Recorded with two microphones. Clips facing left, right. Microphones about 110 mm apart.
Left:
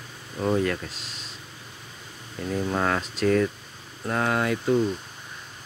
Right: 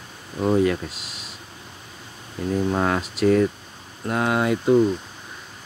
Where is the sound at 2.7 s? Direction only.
10° right (ahead or behind).